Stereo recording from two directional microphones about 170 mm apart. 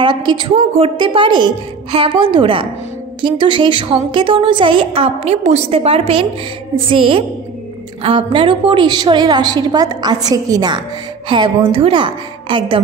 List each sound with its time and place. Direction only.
0.0 s a woman's voice: 25° right (ahead or behind)